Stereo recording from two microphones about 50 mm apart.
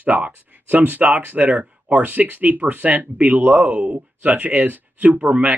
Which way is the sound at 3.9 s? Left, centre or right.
Right.